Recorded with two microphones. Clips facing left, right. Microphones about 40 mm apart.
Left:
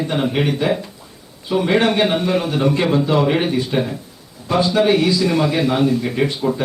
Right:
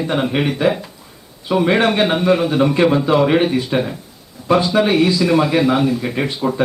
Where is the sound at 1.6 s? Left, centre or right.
Centre.